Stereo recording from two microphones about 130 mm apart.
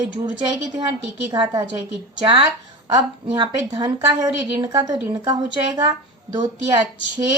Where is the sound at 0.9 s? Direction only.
35° right (ahead or behind).